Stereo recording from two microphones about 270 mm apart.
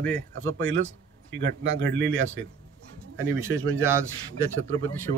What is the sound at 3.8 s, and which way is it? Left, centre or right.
Speech, centre.